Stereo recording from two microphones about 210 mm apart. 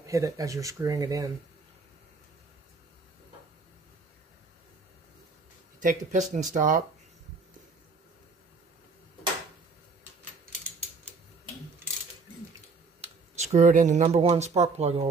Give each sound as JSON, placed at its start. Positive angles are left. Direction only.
{"t": 0.0, "sound": "speech", "side_deg": -15}
{"t": 5.8, "sound": "speech", "side_deg": -40}
{"t": 13.0, "sound": "a sound", "side_deg": -35}
{"t": 14.3, "sound": "speech", "side_deg": -30}